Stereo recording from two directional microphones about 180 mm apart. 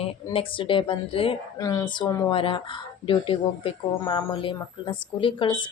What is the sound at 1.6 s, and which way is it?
Speech, 20° left (ahead or behind).